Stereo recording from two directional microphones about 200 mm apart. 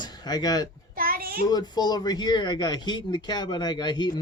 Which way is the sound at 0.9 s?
45° right (ahead or behind).